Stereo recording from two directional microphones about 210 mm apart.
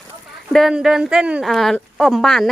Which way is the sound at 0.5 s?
Centre (ahead or behind).